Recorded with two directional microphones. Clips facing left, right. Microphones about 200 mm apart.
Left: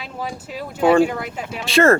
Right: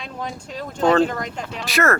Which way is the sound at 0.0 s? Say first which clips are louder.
Left 1 dB; 5° left (ahead or behind).